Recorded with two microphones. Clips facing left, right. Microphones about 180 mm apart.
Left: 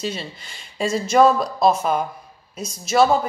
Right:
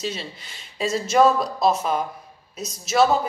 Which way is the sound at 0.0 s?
Centre (ahead or behind).